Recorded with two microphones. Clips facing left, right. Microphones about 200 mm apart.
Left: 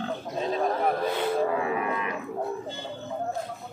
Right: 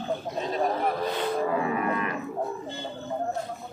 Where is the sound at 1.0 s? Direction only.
10° left (ahead or behind).